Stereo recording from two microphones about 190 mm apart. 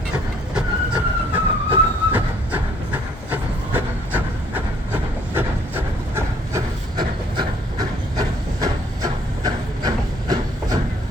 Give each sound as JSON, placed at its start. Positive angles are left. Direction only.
{"t": 0.5, "sound": "vehicle", "side_deg": -5}